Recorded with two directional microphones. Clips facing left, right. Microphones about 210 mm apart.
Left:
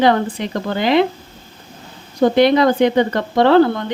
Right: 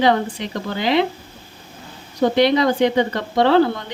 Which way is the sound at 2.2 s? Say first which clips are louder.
Left 3 dB; 50° left (ahead or behind).